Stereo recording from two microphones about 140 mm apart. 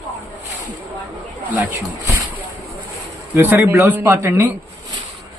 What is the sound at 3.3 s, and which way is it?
A man's voice, 15° right (ahead or behind).